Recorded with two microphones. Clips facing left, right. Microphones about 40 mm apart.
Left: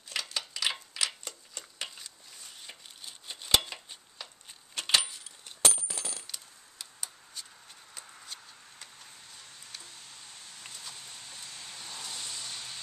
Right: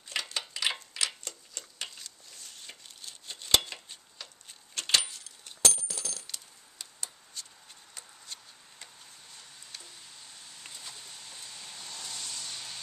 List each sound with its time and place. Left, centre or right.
0.1 s dishes: centre
0.7 s a sound: centre
4.7 s keys jangling: centre
5.8 s coin: centre
6.2 s keys jangling: centre
7.9 s a sound: centre
10.6 s vehicle: centre
11.2 s vehicle: centre